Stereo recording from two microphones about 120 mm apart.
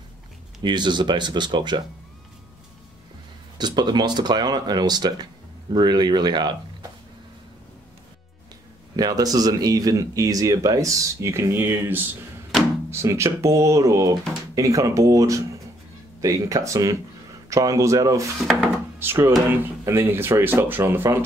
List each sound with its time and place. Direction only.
0.6 s speech: 40° right (ahead or behind)
3.5 s speech: 35° right (ahead or behind)
8.9 s speech: 30° right (ahead or behind)